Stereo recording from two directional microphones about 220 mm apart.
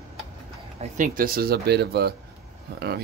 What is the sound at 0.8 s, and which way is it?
Speech, 35° right (ahead or behind).